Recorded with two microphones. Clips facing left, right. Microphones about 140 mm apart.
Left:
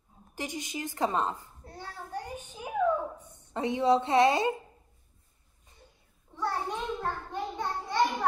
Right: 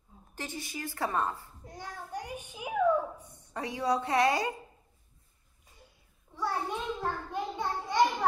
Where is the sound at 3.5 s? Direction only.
25° left (ahead or behind).